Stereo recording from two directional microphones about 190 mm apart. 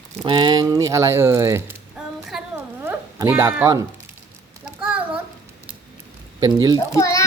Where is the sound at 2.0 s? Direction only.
5° right (ahead or behind).